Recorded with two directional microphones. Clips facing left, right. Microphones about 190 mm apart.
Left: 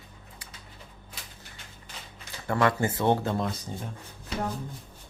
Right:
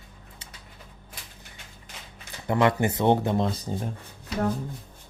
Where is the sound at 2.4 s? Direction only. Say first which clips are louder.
Right 3 dB; 20° right (ahead or behind).